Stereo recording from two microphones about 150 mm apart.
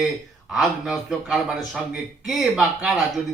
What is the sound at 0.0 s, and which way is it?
Speech, centre (ahead or behind).